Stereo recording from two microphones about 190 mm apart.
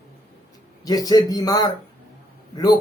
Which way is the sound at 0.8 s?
20° left (ahead or behind).